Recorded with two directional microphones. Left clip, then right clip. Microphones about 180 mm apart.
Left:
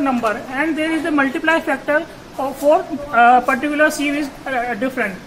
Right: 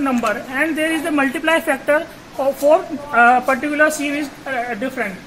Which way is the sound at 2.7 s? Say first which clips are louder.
Left 4 dB; 40° right (ahead or behind).